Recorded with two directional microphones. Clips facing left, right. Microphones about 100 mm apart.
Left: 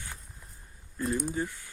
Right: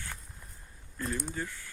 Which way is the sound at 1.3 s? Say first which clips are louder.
Left 5 dB; 20° left (ahead or behind).